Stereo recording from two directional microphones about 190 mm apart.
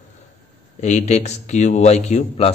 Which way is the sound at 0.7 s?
35° left (ahead or behind).